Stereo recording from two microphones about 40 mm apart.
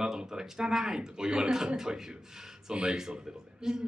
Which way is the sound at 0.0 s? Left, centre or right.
Centre.